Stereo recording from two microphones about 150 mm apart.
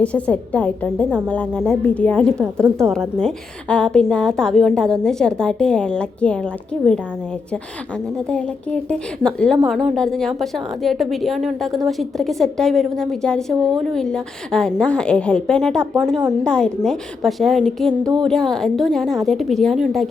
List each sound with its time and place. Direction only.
0.0 s a woman's voice: 10° left (ahead or behind)
2.6 s a woman's voice: 20° right (ahead or behind)
2.9 s a woman's voice: 5° left (ahead or behind)
8.3 s a woman's voice: 5° left (ahead or behind)